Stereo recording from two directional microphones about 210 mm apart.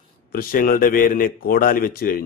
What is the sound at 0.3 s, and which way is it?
A man's voice, 45° left (ahead or behind).